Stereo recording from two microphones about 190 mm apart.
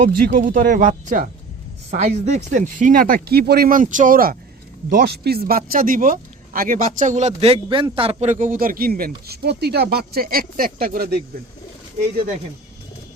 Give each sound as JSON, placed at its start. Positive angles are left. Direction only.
{"t": 0.3, "sound": "speech", "side_deg": -45}